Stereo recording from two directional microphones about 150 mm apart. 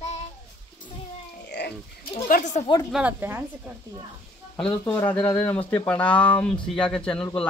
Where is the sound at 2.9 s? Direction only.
10° right (ahead or behind).